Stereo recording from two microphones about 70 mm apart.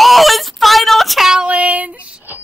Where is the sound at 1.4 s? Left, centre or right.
Right.